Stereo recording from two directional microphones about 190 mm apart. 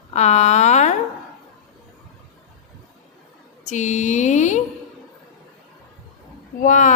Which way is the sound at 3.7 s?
40° left (ahead or behind).